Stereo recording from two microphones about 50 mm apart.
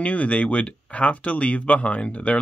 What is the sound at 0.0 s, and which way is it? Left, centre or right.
Speech, left.